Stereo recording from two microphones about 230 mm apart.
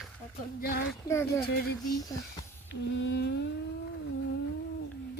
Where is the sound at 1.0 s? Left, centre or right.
Centre.